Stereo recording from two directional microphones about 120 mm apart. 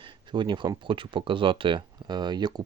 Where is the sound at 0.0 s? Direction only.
40° right (ahead or behind).